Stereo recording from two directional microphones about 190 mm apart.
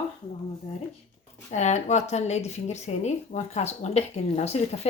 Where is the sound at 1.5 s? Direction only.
40° left (ahead or behind).